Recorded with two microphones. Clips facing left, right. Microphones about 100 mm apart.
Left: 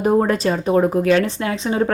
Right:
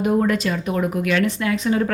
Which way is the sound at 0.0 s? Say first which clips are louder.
Left 3 dB; 35° left (ahead or behind).